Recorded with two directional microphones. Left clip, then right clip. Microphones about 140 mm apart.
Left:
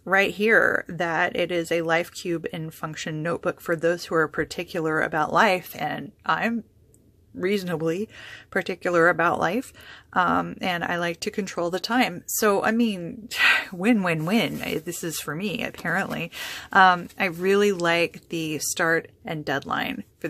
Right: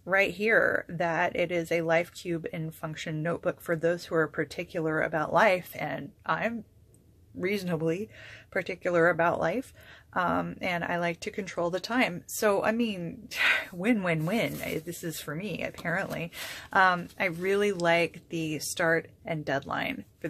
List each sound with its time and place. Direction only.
0.0 s speech: 30° left (ahead or behind)